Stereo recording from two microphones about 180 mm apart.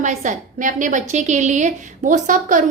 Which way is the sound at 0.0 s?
45° right (ahead or behind).